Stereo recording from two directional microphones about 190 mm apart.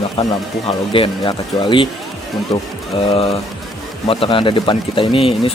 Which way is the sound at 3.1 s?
30° left (ahead or behind).